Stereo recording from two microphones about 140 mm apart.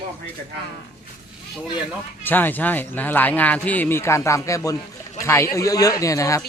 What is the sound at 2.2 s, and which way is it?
A man's voice, 15° left (ahead or behind).